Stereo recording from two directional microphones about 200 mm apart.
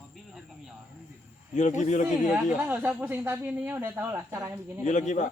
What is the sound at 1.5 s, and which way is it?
Speech, 35° left (ahead or behind).